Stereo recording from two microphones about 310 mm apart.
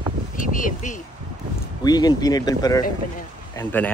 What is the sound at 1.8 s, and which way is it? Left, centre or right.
Speech, centre.